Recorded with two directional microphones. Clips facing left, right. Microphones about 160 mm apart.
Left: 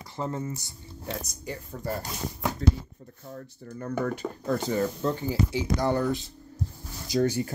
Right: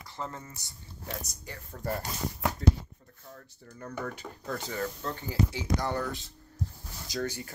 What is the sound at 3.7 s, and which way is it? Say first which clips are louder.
Speech: left 8 dB; 45° left (ahead or behind).